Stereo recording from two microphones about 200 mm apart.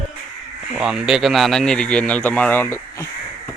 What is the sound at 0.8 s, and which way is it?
Speech, 5° right (ahead or behind).